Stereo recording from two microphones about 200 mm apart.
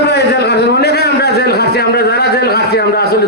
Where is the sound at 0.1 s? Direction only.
55° left (ahead or behind).